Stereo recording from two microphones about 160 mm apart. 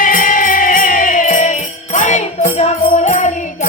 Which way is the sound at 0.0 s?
60° left (ahead or behind).